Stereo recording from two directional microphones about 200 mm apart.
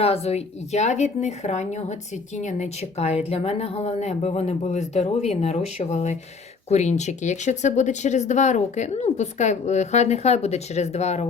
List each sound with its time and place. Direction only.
0.0 s speech: 30° left (ahead or behind)